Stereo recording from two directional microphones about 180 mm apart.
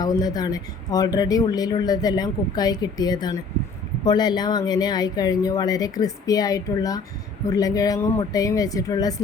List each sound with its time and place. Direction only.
0.0 s speech: 20° left (ahead or behind)